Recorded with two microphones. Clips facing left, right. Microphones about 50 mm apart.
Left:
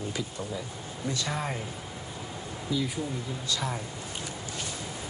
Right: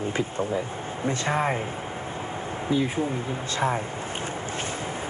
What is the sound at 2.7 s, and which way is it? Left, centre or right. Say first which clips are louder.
Speech: right 6 dB; right.